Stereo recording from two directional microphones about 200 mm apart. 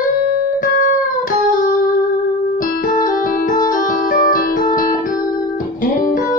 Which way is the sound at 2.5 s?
45° left (ahead or behind).